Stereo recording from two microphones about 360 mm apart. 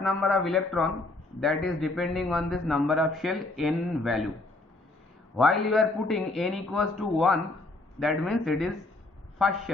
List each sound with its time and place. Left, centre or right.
0.0 s a man's voice: centre
5.4 s a man's voice: centre